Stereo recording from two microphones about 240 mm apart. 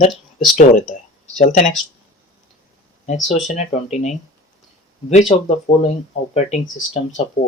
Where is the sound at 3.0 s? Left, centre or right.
Left.